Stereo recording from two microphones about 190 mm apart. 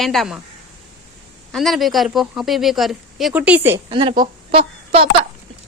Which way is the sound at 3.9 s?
25° right (ahead or behind).